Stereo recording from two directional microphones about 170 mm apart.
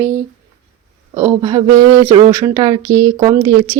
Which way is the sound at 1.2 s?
20° right (ahead or behind).